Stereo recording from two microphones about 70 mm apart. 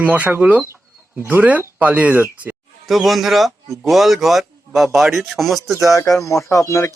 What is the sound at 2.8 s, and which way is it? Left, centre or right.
Speech, centre.